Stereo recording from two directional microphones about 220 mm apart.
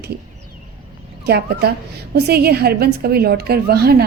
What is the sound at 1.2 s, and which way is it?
A woman's voice, 45° right (ahead or behind).